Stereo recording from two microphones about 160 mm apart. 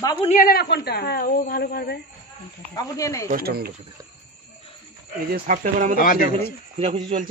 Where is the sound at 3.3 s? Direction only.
70° right (ahead or behind).